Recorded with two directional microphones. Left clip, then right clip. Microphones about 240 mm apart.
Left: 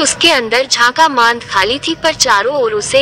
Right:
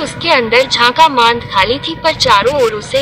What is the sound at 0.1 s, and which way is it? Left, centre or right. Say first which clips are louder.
A woman's voice: even; left.